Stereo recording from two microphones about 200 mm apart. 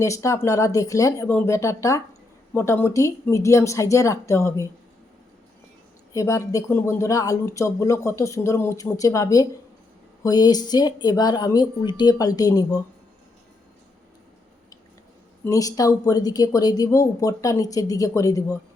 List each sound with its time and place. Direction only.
0.0 s speech: 15° left (ahead or behind)
6.1 s speech: 15° left (ahead or behind)
15.4 s speech: 15° left (ahead or behind)